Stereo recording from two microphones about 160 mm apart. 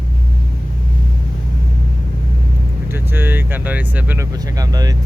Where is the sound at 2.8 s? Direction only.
15° right (ahead or behind).